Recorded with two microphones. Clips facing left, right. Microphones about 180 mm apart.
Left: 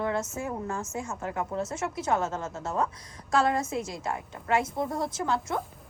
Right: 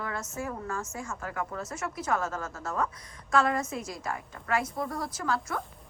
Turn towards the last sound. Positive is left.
turn(degrees=25)  # may be behind; listen again after turning